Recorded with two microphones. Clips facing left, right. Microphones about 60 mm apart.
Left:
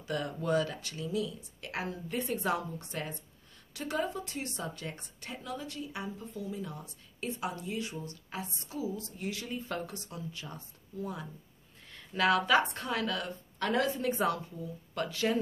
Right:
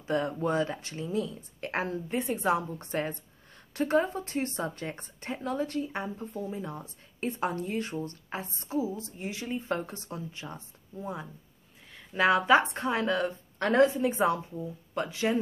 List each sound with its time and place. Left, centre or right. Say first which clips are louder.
0.0 s speech: right 6 dB; right
2.0 s a woman's voice: right 3 dB; right
2.8 s a woman's voice: right 7 dB; right